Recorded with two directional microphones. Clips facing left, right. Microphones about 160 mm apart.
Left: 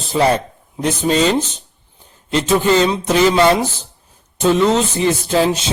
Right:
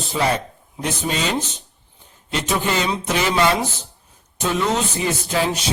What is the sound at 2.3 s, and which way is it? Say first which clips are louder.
A man's voice: left 8 dB; 35° left (ahead or behind).